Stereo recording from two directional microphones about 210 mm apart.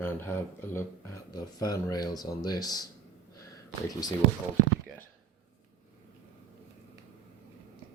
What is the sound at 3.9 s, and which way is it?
Speech, 20° left (ahead or behind).